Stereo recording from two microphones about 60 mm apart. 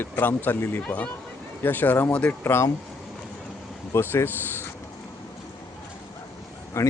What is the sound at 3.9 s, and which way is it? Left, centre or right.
Speech, left.